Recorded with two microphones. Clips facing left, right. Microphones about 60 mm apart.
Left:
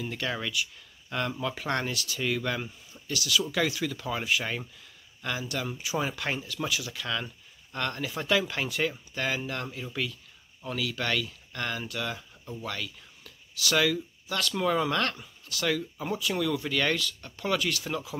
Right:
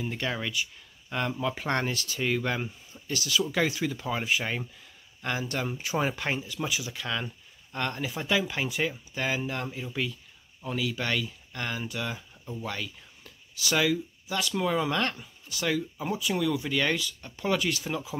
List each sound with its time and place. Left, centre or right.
0.0 s speech: right
5.2 s speech: right
6.2 s speech: centre
14.5 s speech: centre